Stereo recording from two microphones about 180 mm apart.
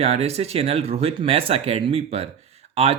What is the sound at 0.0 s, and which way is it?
Speech, 35° right (ahead or behind).